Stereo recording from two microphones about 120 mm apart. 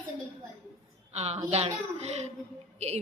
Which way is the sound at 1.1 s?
65° right (ahead or behind).